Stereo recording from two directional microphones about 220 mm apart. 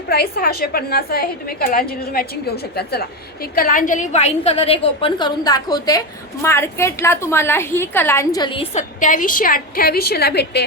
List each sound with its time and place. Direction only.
0.1 s a woman's voice: 45° left (ahead or behind)